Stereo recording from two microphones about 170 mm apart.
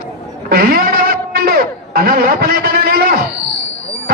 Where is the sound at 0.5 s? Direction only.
60° right (ahead or behind).